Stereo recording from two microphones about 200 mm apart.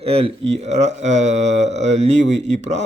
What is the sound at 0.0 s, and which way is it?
Speech, 30° right (ahead or behind).